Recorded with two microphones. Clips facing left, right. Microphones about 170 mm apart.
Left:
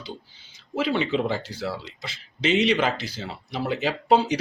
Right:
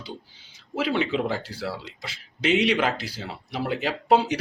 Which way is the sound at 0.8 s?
5° right (ahead or behind).